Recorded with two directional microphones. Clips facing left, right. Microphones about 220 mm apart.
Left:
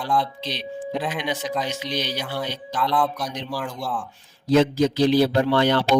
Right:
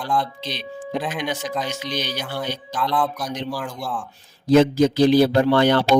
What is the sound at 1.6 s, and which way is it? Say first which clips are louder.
Speech: even; 45° right (ahead or behind).